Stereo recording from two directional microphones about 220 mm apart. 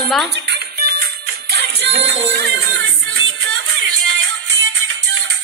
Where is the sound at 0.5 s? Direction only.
45° right (ahead or behind).